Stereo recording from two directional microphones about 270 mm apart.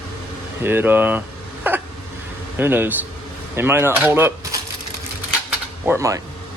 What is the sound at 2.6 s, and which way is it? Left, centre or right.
Speech, centre.